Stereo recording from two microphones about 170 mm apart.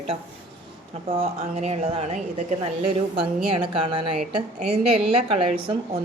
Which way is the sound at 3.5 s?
30° right (ahead or behind).